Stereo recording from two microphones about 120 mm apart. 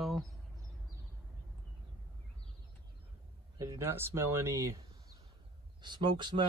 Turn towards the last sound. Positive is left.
turn(degrees=-40)  # may be behind; listen again after turning